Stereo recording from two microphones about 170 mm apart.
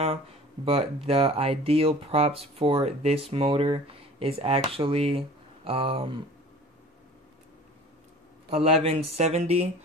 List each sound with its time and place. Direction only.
0.7 s speech: 35° right (ahead or behind)
8.5 s speech: 35° right (ahead or behind)